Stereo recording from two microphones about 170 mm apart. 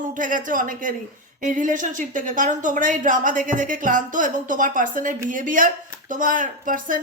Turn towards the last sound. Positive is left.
turn(degrees=-55)  # may be behind; listen again after turning